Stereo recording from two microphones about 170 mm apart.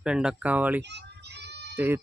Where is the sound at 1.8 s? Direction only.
15° right (ahead or behind).